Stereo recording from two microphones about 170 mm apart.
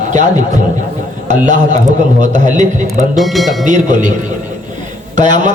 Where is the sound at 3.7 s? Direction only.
45° right (ahead or behind).